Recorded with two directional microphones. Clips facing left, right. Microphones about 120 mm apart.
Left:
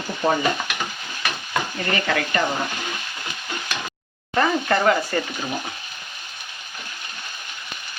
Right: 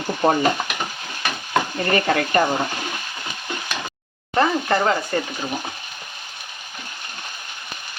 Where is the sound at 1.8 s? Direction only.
40° right (ahead or behind).